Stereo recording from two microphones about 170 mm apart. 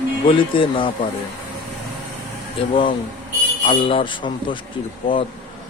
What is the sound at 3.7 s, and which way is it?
Speech, 30° left (ahead or behind).